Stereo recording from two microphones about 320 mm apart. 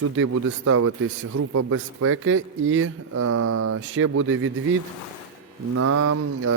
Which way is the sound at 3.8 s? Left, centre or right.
Right.